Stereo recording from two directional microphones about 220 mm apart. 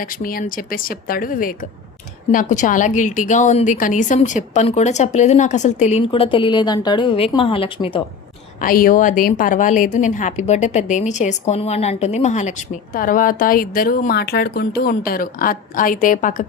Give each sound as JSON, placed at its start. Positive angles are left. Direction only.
{"t": 0.0, "sound": "a woman's voice", "side_deg": 40}
{"t": 8.6, "sound": "a woman's voice", "side_deg": 40}